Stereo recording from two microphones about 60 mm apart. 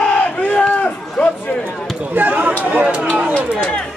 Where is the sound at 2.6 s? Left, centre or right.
Right.